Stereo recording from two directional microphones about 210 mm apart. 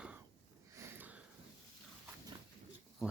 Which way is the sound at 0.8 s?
10° right (ahead or behind).